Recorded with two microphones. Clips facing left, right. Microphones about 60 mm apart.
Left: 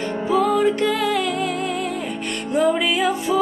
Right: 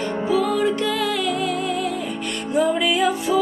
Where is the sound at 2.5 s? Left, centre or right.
Left.